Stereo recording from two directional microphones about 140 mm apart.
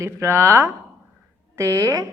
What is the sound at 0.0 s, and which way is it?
A woman's voice, 20° right (ahead or behind).